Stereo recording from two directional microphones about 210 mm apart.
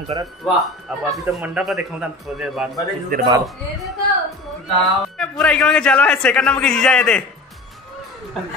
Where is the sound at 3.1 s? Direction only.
45° right (ahead or behind).